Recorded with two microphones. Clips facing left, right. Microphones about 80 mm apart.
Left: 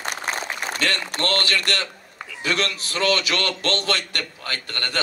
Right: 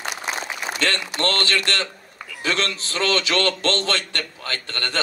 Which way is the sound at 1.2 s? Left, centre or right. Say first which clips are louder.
Right 1 dB; right.